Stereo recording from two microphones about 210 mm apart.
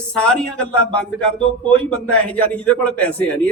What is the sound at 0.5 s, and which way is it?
Speech, 90° left.